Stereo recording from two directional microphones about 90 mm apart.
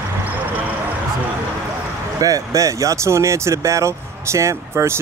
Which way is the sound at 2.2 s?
40° right (ahead or behind).